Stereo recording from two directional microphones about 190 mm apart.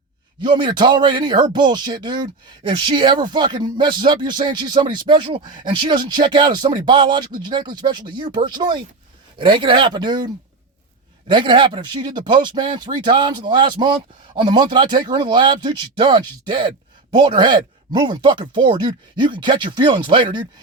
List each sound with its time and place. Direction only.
0.4 s speech: 25° right (ahead or behind)